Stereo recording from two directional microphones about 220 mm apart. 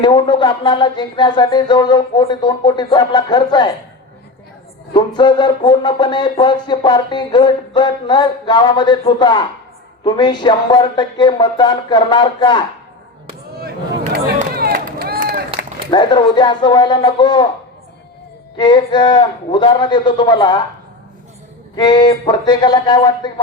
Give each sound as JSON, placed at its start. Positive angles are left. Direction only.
{"t": 0.0, "sound": "music", "side_deg": 20}
{"t": 4.9, "sound": "music", "side_deg": 20}
{"t": 14.0, "sound": "run", "side_deg": -40}
{"t": 15.9, "sound": "music", "side_deg": 20}
{"t": 18.5, "sound": "music", "side_deg": 20}
{"t": 21.8, "sound": "music", "side_deg": 20}